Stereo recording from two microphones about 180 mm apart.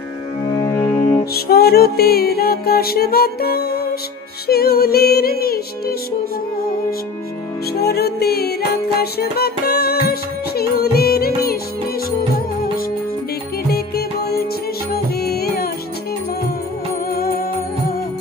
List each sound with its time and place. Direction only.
0.6 s music: 15° left (ahead or behind)
1.3 s music: 60° left (ahead or behind)
7.7 s music: 65° left (ahead or behind)
13.7 s music: 60° left (ahead or behind)
17.1 s music: 55° left (ahead or behind)